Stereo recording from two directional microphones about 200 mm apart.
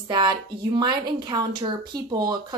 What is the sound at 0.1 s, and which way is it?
Speech, 20° right (ahead or behind).